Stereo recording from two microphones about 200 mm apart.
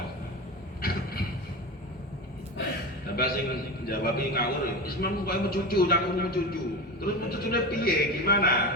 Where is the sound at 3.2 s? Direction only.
50° left (ahead or behind).